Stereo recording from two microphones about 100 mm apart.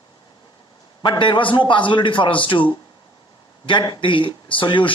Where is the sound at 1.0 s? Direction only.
50° left (ahead or behind).